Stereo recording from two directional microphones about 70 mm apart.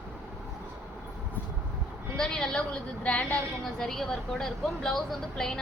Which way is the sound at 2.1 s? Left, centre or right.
Centre.